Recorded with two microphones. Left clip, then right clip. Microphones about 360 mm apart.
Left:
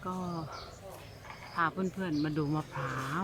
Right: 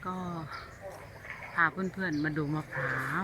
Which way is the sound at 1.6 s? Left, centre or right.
Centre.